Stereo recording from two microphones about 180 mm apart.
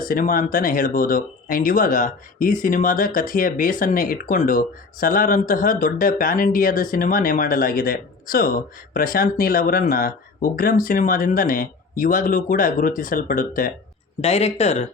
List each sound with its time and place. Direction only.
0.0 s speech: 50° left (ahead or behind)
14.2 s speech: 35° left (ahead or behind)